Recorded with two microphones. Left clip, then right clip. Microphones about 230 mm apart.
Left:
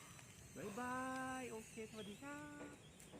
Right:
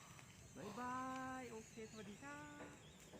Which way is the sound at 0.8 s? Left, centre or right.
Left.